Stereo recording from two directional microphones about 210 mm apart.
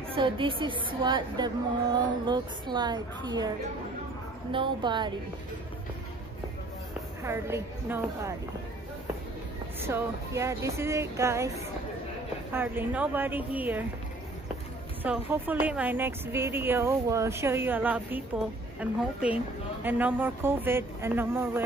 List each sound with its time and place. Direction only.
0.1 s a woman's voice: 25° right (ahead or behind)
7.2 s a woman's voice: 10° right (ahead or behind)
9.8 s a woman's voice: 10° right (ahead or behind)
15.0 s a woman's voice: 10° right (ahead or behind)